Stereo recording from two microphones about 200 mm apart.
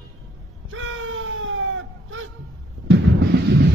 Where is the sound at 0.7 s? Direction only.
80° right.